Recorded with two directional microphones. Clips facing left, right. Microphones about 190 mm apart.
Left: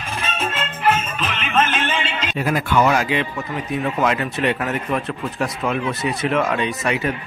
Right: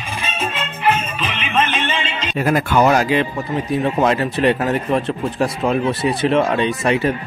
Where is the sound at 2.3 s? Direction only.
45° right (ahead or behind).